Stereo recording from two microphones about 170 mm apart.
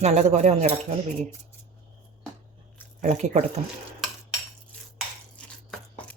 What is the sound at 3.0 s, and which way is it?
Speech, 45° right (ahead or behind).